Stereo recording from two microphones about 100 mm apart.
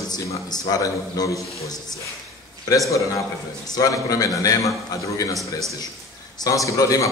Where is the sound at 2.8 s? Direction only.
30° left (ahead or behind).